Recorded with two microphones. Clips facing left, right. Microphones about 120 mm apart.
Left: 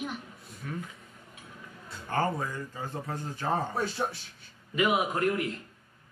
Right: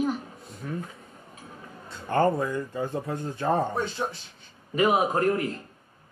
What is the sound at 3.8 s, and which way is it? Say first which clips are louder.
Speech: right 2 dB; centre (ahead or behind).